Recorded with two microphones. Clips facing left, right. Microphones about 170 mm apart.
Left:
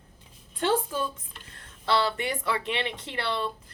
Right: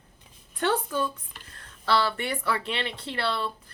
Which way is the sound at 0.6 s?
25° left (ahead or behind).